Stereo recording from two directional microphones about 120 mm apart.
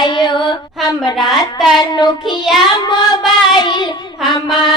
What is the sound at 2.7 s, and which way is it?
Child singing, 35° left (ahead or behind).